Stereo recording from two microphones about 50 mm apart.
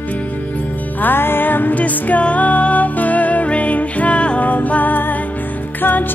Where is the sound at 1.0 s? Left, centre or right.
Left.